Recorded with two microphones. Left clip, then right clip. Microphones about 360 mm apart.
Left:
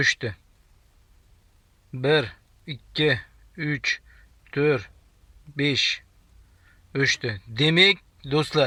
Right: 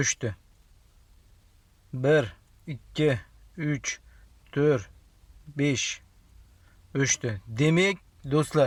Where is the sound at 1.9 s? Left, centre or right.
Centre.